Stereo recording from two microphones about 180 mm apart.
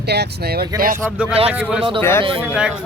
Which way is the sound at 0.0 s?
65° right (ahead or behind).